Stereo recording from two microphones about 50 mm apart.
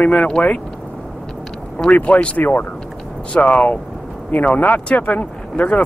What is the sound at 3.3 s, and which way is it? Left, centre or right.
Speech, left.